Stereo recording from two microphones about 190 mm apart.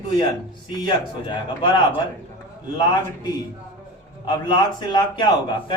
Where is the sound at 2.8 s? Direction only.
20° left (ahead or behind).